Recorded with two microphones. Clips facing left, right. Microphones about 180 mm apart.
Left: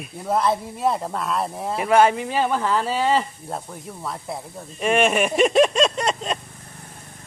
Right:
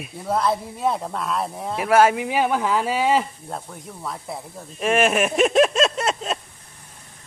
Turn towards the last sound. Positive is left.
turn(degrees=-5)  # may be behind; listen again after turning